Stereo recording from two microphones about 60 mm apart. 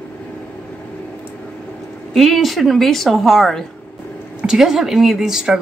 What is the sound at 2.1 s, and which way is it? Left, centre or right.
A woman's voice, centre.